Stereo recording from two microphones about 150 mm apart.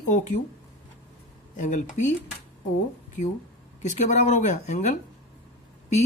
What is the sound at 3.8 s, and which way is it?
Speech, 50° left (ahead or behind).